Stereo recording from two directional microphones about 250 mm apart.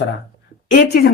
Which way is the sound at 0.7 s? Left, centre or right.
Left.